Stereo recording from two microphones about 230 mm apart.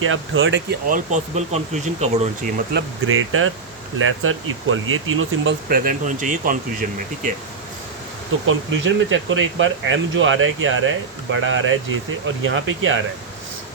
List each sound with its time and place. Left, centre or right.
0.0 s speech: right
0.9 s speech: right
2.7 s speech: right
5.6 s speech: right
8.4 s speech: right